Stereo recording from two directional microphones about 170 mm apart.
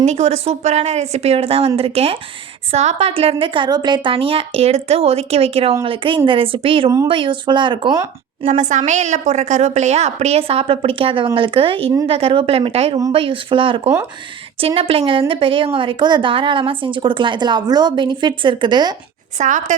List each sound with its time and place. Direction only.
0.0 s a woman's voice: 40° right (ahead or behind)
8.4 s a woman's voice: 45° right (ahead or behind); by 18.9 s 25° right (ahead or behind)
19.4 s a woman's voice: 45° right (ahead or behind)